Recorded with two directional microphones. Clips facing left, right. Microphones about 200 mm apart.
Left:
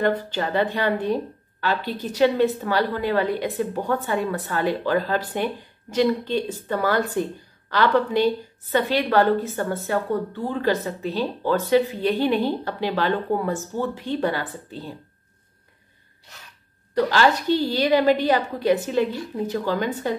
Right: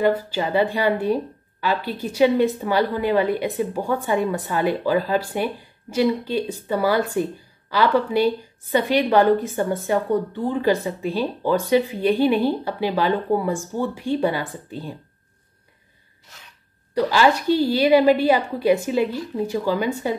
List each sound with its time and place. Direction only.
0.0 s a woman's voice: 10° right (ahead or behind)
17.1 s a woman's voice: 10° right (ahead or behind)